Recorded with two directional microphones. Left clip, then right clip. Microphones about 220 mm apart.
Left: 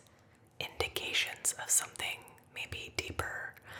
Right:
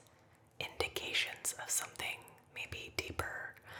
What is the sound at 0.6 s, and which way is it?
Whispering, 5° left (ahead or behind).